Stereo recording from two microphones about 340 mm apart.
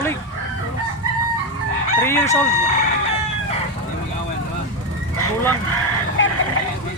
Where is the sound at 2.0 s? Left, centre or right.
Centre.